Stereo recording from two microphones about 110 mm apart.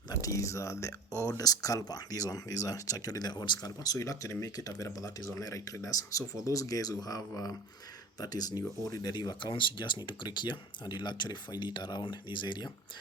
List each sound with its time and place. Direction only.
0.2 s speech: 30° left (ahead or behind)
3.9 s speech: 30° left (ahead or behind)